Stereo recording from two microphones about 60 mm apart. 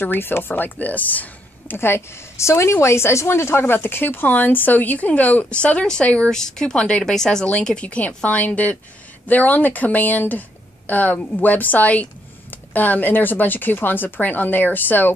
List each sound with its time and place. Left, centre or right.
0.0 s speech: left
1.8 s a woman's voice: left